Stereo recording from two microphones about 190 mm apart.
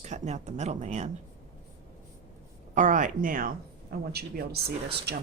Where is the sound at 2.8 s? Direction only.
45° right (ahead or behind).